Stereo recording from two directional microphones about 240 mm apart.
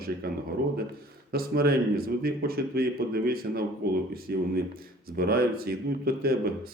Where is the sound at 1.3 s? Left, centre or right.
Right.